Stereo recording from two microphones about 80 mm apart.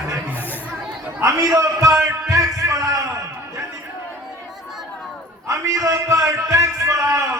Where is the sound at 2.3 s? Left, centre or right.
Right.